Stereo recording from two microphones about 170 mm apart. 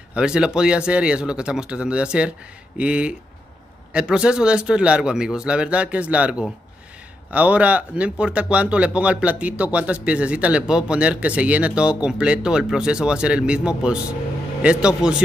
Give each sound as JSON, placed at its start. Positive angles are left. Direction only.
{"t": 0.1, "sound": "a man's voice", "side_deg": -5}